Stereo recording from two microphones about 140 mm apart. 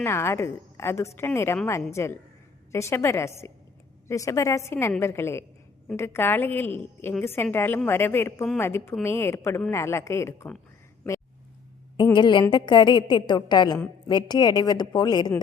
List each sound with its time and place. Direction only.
0.0 s a woman's voice: 20° left (ahead or behind)
12.1 s a woman's voice: 35° left (ahead or behind)